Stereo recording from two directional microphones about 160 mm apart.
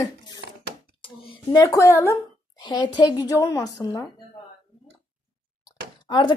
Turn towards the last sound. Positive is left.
turn(degrees=30)  # may be behind; listen again after turning